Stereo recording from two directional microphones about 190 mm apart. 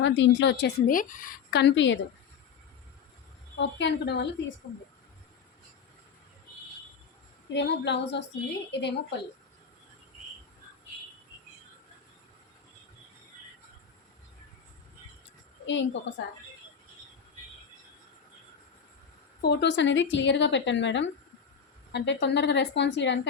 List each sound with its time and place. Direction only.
0.0 s a woman's voice: 70° left (ahead or behind)
0.9 s a woman's voice: 45° left (ahead or behind); by 2.0 s 75° left (ahead or behind)
3.6 s a woman's voice: 65° left (ahead or behind)
7.5 s a woman's voice: 65° left (ahead or behind)
15.6 s a woman's voice: 75° left (ahead or behind)
19.4 s a woman's voice: 60° left (ahead or behind)